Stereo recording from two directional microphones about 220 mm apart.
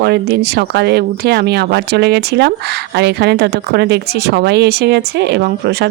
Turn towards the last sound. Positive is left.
turn(degrees=-50)  # may be behind; listen again after turning